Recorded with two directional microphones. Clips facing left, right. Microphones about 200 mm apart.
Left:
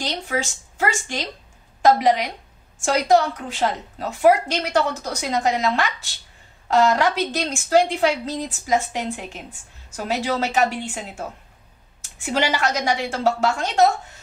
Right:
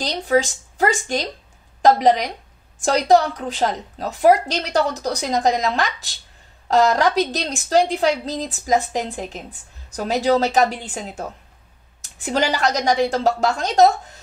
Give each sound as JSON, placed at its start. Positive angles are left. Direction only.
{"t": 0.0, "sound": "a woman's voice", "side_deg": -35}